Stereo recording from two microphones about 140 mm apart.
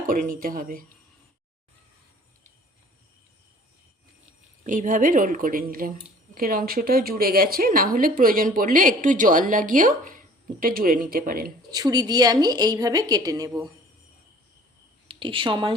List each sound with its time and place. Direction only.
0.0 s a woman's voice: 85° right
4.6 s a woman's voice: 70° right (ahead or behind); by 11.5 s 90° right
11.7 s a woman's voice: 25° right (ahead or behind)
15.0 s speech: 40° right (ahead or behind)